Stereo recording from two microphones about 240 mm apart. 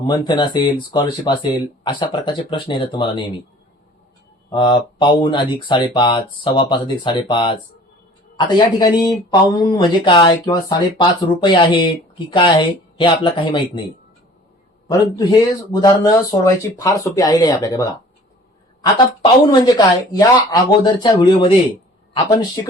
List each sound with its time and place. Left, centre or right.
0.0 s speech: centre
4.5 s speech: centre
14.8 s speech: centre